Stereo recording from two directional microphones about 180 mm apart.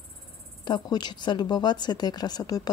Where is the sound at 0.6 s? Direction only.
25° left (ahead or behind).